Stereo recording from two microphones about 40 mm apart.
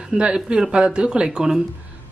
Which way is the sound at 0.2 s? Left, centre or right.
Right.